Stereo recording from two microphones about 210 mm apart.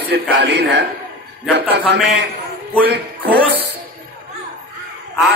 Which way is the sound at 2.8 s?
50° right (ahead or behind).